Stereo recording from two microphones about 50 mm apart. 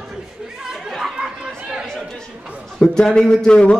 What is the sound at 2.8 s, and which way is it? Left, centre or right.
A man's voice, centre.